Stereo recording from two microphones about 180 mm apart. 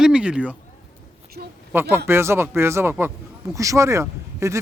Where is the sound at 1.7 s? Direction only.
15° right (ahead or behind).